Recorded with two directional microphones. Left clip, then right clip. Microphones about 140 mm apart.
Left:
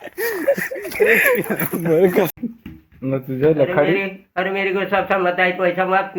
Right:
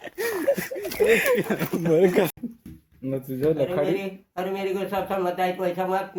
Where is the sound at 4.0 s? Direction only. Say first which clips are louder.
Left 9 dB; 30° right (ahead or behind).